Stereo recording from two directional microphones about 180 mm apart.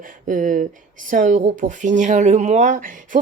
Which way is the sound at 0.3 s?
45° right (ahead or behind).